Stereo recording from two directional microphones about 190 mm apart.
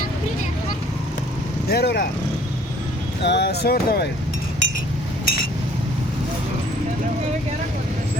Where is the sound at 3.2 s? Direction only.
65° left (ahead or behind).